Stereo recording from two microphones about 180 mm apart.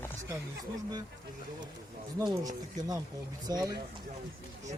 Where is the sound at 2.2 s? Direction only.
20° right (ahead or behind).